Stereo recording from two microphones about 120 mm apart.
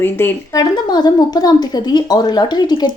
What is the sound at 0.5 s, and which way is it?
Speech, 35° left (ahead or behind).